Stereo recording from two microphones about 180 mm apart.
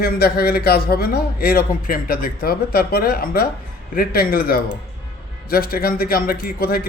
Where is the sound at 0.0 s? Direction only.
60° left (ahead or behind).